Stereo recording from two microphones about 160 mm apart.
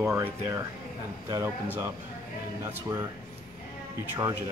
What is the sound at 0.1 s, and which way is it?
Speech, 15° right (ahead or behind).